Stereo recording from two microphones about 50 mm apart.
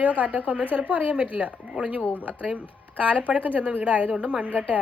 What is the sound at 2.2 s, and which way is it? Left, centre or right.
Speech, right.